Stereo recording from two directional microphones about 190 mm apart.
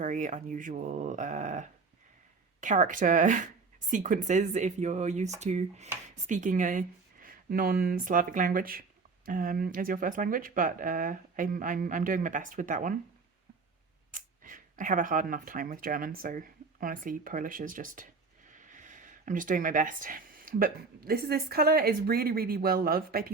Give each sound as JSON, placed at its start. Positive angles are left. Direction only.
{"t": 0.0, "sound": "speech", "side_deg": -40}
{"t": 14.1, "sound": "speech", "side_deg": -45}